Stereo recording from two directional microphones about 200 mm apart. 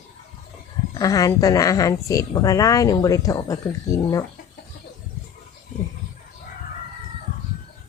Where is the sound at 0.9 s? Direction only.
15° left (ahead or behind).